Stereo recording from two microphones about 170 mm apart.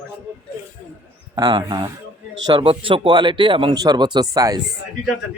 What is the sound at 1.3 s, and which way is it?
Speech, 25° right (ahead or behind).